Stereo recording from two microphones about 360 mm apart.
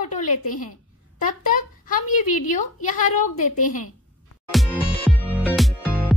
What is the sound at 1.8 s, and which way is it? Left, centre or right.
A woman's voice, left.